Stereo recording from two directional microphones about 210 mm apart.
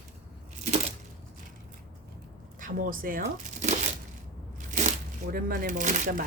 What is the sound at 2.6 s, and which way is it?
Speech, 40° right (ahead or behind).